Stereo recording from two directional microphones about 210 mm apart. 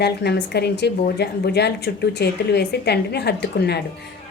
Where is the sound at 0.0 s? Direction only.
50° left (ahead or behind).